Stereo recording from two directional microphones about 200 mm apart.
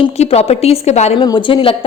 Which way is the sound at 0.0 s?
30° left (ahead or behind).